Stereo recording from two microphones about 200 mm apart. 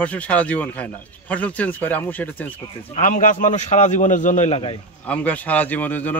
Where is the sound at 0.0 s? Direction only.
5° left (ahead or behind).